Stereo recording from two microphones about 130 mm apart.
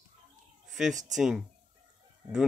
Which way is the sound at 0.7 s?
5° right (ahead or behind).